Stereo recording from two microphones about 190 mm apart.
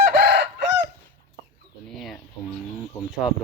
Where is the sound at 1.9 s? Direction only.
Centre (ahead or behind).